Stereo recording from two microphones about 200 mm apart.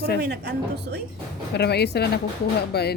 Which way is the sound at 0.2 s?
55° right (ahead or behind).